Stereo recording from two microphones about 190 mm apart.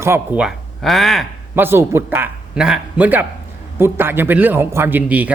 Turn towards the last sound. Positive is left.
turn(degrees=-10)  # may be behind; listen again after turning